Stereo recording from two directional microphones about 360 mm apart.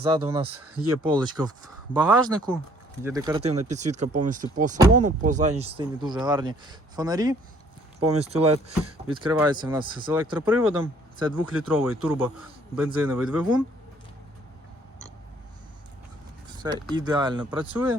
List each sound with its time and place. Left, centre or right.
0.0 s speech: centre
16.9 s speech: centre